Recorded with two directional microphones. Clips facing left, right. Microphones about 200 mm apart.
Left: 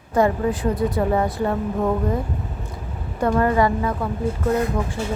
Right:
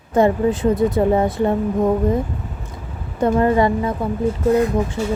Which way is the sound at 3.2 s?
20° right (ahead or behind).